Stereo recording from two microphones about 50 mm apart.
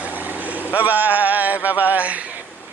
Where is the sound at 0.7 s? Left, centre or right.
Right.